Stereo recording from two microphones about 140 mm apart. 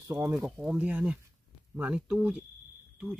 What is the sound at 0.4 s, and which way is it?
Speech, 10° right (ahead or behind).